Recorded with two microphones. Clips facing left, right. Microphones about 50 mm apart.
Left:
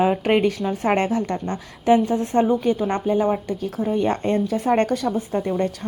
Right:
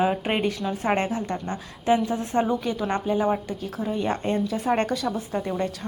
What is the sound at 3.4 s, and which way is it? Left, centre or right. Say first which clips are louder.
A woman's voice: left 5 dB; left.